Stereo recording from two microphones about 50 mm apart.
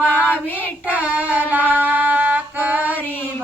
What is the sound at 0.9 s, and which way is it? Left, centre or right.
Child singing, right.